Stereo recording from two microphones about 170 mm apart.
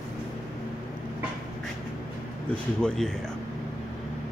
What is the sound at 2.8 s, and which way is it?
Speech, 5° left (ahead or behind).